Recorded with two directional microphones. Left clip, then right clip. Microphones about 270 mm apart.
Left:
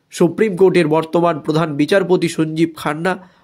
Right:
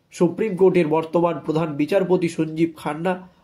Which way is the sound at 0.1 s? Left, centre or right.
Left.